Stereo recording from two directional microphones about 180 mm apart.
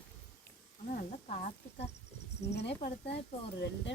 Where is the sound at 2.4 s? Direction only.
65° left (ahead or behind).